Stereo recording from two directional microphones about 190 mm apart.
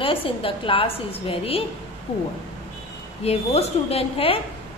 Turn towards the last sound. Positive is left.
turn(degrees=30)  # may be behind; listen again after turning